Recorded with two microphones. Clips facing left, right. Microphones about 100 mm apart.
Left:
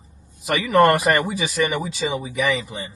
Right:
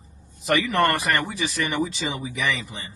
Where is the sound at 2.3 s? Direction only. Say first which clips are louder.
Left 5 dB; centre (ahead or behind).